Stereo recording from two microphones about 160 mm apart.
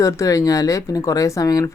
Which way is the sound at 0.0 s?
20° left (ahead or behind).